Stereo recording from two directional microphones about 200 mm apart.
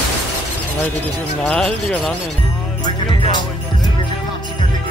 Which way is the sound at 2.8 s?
20° left (ahead or behind).